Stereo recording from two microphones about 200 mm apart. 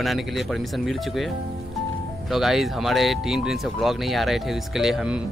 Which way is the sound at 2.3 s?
Centre (ahead or behind).